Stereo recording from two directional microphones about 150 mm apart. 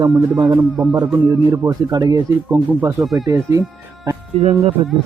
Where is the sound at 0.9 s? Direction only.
25° right (ahead or behind).